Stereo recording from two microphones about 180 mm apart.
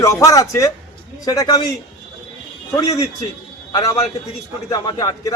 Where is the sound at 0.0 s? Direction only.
20° left (ahead or behind).